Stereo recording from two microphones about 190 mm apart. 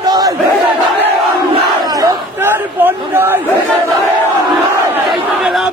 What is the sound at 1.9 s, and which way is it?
Chatter, 15° right (ahead or behind).